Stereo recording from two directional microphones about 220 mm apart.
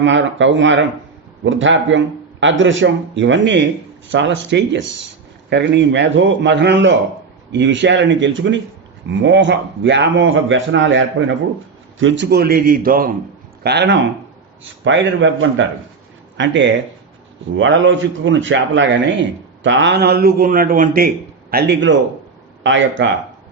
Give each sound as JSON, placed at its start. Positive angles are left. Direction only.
{"t": 0.0, "sound": "a man's voice", "side_deg": -55}
{"t": 21.5, "sound": "a man's voice", "side_deg": -55}